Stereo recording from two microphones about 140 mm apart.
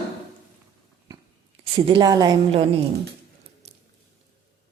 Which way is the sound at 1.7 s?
35° right (ahead or behind).